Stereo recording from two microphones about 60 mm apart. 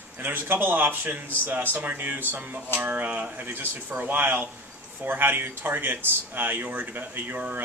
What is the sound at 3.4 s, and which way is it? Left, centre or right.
Speech, right.